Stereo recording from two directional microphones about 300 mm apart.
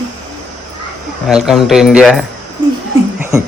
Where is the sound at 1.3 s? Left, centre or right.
Centre.